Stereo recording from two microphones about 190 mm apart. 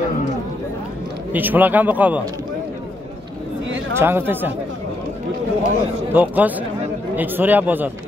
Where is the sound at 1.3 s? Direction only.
10° right (ahead or behind).